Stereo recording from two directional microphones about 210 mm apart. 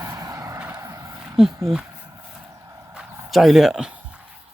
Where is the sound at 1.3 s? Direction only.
Centre (ahead or behind).